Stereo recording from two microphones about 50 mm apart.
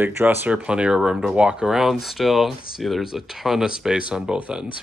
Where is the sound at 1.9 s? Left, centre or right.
Centre.